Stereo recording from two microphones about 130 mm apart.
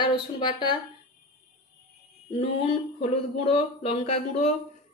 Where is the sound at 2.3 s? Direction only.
50° left (ahead or behind).